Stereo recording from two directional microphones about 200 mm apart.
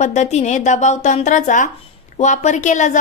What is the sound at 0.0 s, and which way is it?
A woman's voice, 35° left (ahead or behind).